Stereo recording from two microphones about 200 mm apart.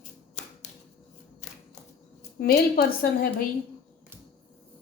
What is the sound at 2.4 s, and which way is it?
Speech, 50° left (ahead or behind).